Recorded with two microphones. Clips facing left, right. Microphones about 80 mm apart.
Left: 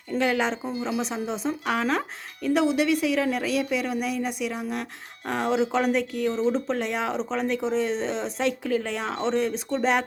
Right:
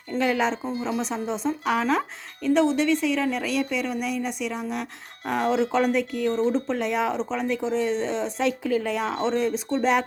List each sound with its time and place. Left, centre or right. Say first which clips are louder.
0.1 s a woman's voice: right 1 dB; centre